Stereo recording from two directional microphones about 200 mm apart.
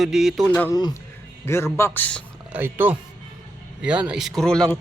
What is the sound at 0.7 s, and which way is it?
A man's voice, 20° left (ahead or behind).